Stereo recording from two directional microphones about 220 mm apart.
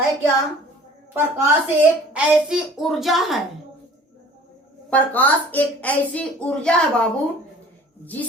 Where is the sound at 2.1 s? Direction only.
Centre (ahead or behind).